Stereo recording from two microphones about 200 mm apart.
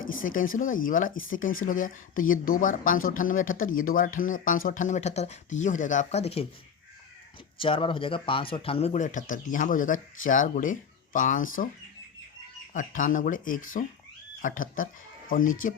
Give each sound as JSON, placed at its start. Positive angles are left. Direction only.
{"t": 0.2, "sound": "speech", "side_deg": 45}
{"t": 7.6, "sound": "speech", "side_deg": 25}
{"t": 12.7, "sound": "speech", "side_deg": 40}